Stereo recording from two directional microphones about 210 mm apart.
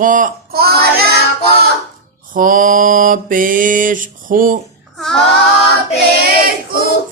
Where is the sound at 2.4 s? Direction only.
40° right (ahead or behind).